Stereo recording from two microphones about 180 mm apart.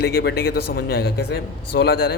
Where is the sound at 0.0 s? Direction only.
65° left (ahead or behind).